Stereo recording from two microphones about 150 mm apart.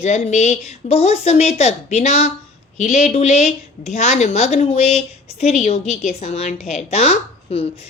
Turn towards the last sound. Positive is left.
turn(degrees=45)  # may be behind; listen again after turning